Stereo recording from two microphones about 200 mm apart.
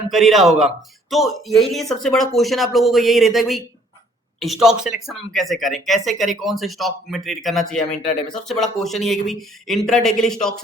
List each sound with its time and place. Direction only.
0.1 s speech: centre (ahead or behind)
7.8 s speech: 40° left (ahead or behind)
8.3 s speech: centre (ahead or behind)